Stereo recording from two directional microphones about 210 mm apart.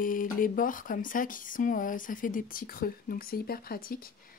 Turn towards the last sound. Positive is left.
turn(degrees=45)  # may be behind; listen again after turning